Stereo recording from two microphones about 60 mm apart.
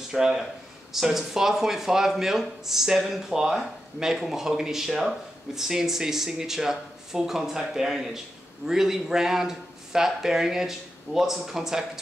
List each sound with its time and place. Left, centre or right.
0.1 s speech: centre